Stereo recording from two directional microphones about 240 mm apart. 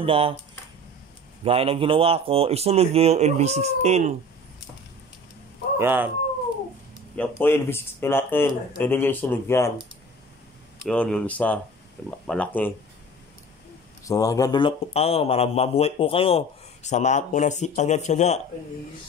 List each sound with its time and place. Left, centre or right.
0.0 s speech: right
1.4 s speech: right
5.8 s speech: centre
7.2 s speech: centre
10.9 s speech: centre
14.0 s speech: centre